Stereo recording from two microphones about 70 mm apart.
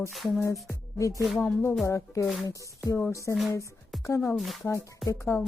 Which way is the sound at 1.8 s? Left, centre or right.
Left.